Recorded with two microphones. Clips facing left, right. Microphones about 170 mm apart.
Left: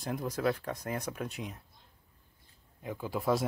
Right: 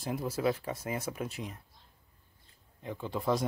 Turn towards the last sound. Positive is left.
turn(degrees=5)  # may be behind; listen again after turning